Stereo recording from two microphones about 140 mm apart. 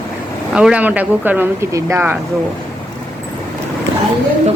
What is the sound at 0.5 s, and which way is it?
A woman's voice, 10° right (ahead or behind).